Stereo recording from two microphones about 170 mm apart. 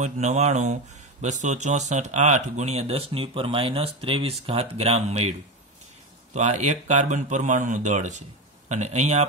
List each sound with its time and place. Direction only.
0.0 s speech: 45° right (ahead or behind)
6.3 s speech: 45° right (ahead or behind)